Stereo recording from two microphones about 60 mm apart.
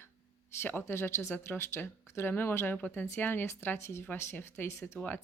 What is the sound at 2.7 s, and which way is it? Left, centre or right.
Speech, left.